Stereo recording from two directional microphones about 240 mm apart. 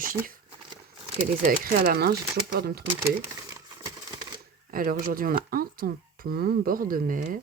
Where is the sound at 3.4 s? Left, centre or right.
Centre.